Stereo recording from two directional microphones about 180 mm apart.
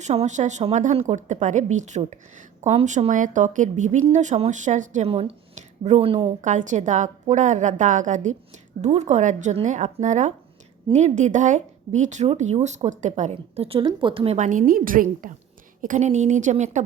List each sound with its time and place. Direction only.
0.0 s speech: 40° right (ahead or behind)
14.3 s speech: 45° right (ahead or behind)